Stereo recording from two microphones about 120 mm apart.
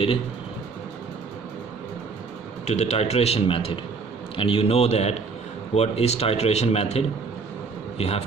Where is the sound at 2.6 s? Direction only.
60° left (ahead or behind).